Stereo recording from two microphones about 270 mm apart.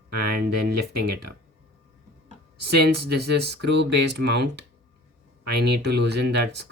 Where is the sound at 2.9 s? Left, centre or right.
Right.